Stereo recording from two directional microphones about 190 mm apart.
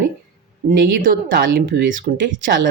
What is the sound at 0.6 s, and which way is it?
Speech, 45° right (ahead or behind).